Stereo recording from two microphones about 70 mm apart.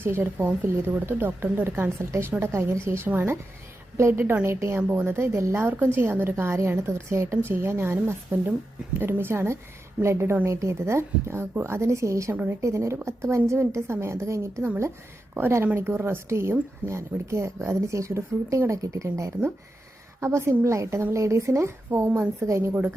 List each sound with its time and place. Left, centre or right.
0.0 s a woman's voice: right
4.8 s a woman's voice: right
5.0 s a woman's voice: right
5.6 s a woman's voice: right
15.4 s a woman's voice: right